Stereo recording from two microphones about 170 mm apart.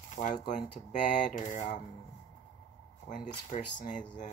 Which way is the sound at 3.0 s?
45° left (ahead or behind).